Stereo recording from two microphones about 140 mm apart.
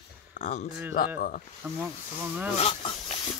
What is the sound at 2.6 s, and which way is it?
Speech, 40° left (ahead or behind).